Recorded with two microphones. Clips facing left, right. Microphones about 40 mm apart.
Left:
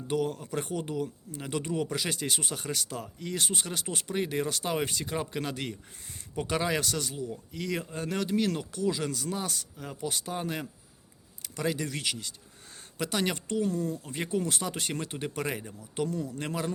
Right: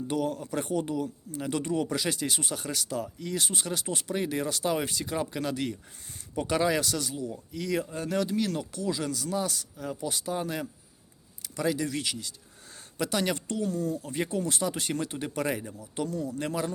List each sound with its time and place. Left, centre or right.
0.1 s speech: centre
4.4 s speech: left
9.7 s speech: centre
10.0 s speech: left
10.3 s speech: centre
11.9 s speech: left
13.0 s speech: centre
13.3 s speech: left
14.0 s speech: centre
14.3 s speech: left
14.8 s speech: centre
15.4 s speech: centre